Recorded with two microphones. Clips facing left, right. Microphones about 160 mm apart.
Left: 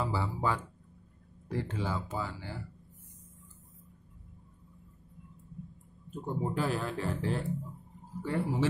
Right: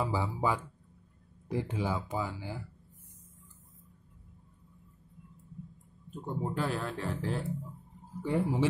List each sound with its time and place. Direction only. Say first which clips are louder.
0.0 s speech: right 1 dB; 15° right (ahead or behind)
6.2 s speech: left 1 dB; centre (ahead or behind)
8.2 s speech: right 2 dB; 15° right (ahead or behind)